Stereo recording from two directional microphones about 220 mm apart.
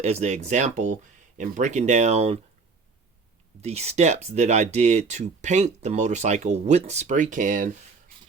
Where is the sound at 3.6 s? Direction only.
30° right (ahead or behind).